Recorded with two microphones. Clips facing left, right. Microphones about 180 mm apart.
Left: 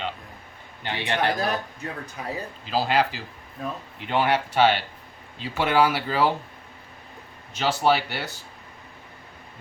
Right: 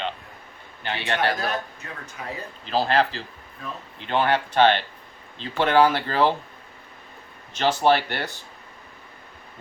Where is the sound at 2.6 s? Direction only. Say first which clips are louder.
Right 1 dB; 10° left (ahead or behind).